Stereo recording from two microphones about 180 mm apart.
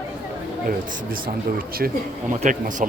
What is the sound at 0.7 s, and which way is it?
Speech, 55° right (ahead or behind).